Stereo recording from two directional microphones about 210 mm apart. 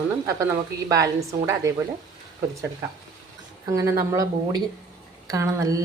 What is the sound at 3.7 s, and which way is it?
A woman's voice, 15° right (ahead or behind).